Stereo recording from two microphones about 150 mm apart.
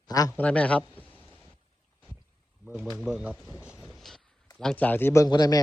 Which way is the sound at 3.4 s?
5° right (ahead or behind).